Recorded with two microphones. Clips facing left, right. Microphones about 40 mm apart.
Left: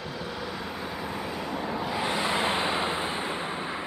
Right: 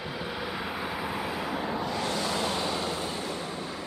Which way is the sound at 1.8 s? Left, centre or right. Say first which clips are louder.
Left 2 dB; centre.